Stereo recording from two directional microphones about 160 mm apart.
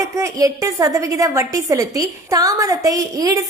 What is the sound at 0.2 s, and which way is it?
A woman's voice, 20° right (ahead or behind).